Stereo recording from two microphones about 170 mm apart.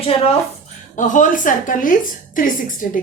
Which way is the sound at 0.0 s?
35° left (ahead or behind).